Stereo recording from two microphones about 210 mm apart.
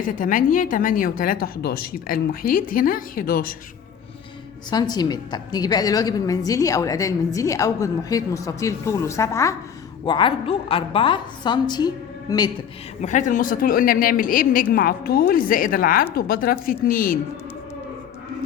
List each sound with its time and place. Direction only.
0.0 s a woman's voice: 40° left (ahead or behind)
4.7 s a woman's voice: 20° left (ahead or behind)
13.0 s a woman's voice: 35° left (ahead or behind)